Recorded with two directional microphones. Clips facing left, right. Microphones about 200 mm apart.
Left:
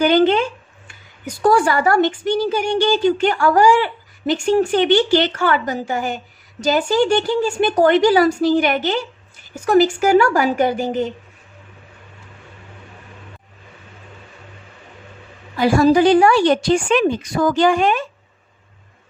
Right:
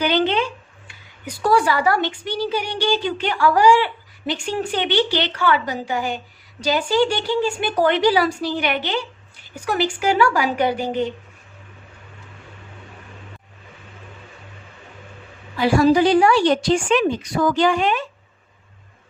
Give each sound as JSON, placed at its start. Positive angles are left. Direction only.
{"t": 0.0, "sound": "speech", "side_deg": 50}
{"t": 15.5, "sound": "speech", "side_deg": 45}